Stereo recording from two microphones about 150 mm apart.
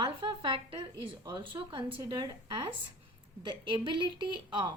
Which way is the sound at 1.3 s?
35° right (ahead or behind).